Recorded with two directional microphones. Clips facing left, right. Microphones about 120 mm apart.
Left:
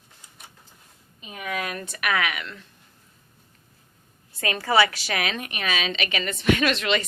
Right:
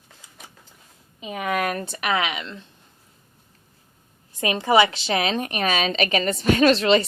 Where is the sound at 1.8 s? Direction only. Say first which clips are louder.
Right 2 dB; 25° right (ahead or behind).